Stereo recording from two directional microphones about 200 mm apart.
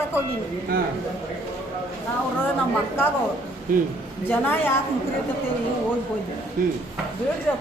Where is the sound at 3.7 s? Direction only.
45° right (ahead or behind).